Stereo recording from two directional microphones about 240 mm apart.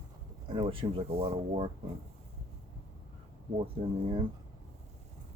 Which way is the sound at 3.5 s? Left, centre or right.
Right.